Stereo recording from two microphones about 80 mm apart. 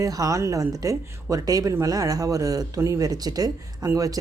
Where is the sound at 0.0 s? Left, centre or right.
Right.